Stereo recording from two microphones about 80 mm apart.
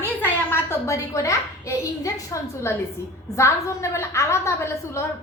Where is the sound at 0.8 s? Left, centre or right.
Left.